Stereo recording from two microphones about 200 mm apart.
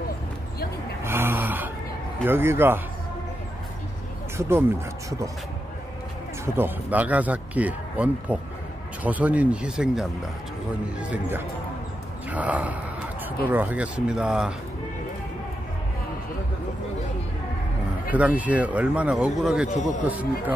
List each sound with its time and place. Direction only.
1.0 s a sound: 10° right (ahead or behind)
2.2 s speech: 10° right (ahead or behind)
4.4 s speech: 10° right (ahead or behind)
6.4 s speech: 10° right (ahead or behind)
18.1 s speech: 5° right (ahead or behind)